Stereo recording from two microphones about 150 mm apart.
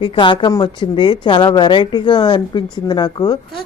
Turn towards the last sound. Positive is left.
turn(degrees=30)  # may be behind; listen again after turning